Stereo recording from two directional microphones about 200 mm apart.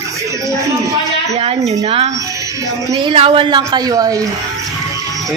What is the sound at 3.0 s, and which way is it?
A woman's voice, 25° right (ahead or behind).